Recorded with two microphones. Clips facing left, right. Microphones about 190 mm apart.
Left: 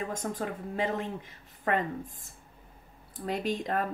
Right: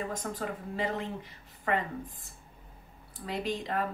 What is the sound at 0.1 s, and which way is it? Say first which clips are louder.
Speech: left 2 dB; 50° left (ahead or behind).